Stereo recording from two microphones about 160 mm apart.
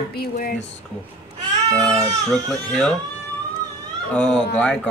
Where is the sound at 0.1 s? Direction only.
70° left (ahead or behind).